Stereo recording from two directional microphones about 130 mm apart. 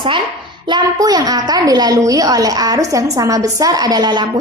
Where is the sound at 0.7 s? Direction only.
30° right (ahead or behind).